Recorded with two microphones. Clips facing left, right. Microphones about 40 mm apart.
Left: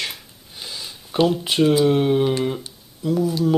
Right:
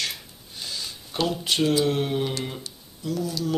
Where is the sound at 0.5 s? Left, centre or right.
Centre.